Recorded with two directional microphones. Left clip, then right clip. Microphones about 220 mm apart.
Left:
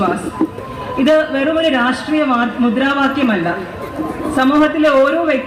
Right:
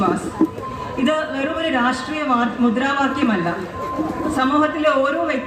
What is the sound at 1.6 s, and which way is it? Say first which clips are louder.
A man's voice: left 4 dB; 45° left (ahead or behind).